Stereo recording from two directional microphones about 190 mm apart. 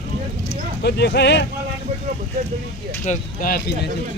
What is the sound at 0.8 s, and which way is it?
Speech, 60° left (ahead or behind).